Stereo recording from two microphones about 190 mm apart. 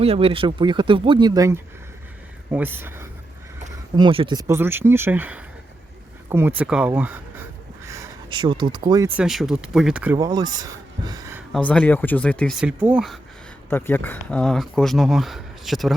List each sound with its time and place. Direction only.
0.0 s speech: 30° right (ahead or behind); by 3.1 s 10° right (ahead or behind)
3.9 s speech: 25° right (ahead or behind); by 7.4 s 10° right (ahead or behind)
7.9 s speech: 20° right (ahead or behind)
9.0 s speech: 5° right (ahead or behind)
10.2 s speech: 20° right (ahead or behind)
11.5 s speech: 5° left (ahead or behind)
13.7 s speech: 10° left (ahead or behind)